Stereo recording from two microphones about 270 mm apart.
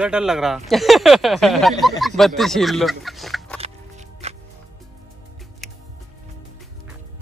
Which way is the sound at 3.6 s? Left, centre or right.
Right.